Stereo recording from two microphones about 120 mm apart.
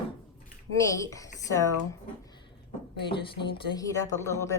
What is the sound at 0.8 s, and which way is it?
Speech, 25° left (ahead or behind).